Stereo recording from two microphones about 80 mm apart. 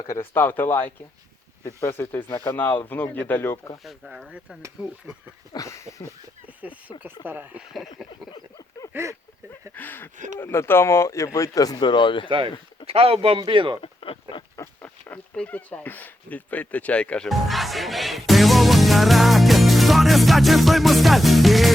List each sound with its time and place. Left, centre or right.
0.2 s speech: left
3.8 s speech: centre
4.3 s speech: centre
5.5 s speech: left
6.6 s a sound: centre
7.3 s speech: right
7.6 s speech: centre
8.9 s speech: right
9.7 s speech: left
13.3 s speech: right
14.8 s a sound: left
15.4 s speech: centre
17.2 s music: centre